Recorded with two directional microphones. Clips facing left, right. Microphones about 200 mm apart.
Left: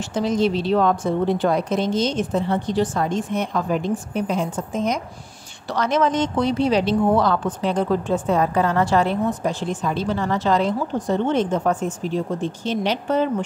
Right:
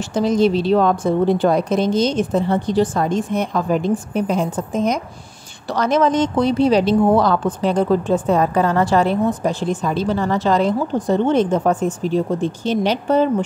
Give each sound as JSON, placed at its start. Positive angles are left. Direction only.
{"t": 0.1, "sound": "speech", "side_deg": -40}